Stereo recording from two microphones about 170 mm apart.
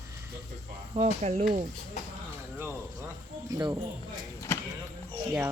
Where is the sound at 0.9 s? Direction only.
40° right (ahead or behind).